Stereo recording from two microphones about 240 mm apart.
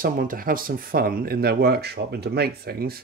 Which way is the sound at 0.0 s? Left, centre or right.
Right.